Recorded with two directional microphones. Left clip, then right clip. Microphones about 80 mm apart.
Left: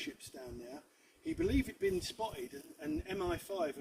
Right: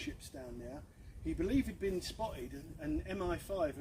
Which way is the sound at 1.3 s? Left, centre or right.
Right.